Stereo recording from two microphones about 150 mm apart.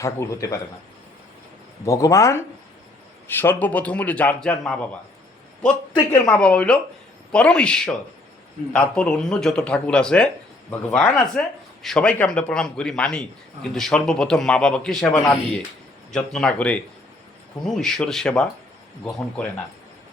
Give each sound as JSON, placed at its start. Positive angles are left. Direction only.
{"t": 0.0, "sound": "a man's voice", "side_deg": 20}
{"t": 1.8, "sound": "a man's voice", "side_deg": 20}
{"t": 6.2, "sound": "speech", "side_deg": 5}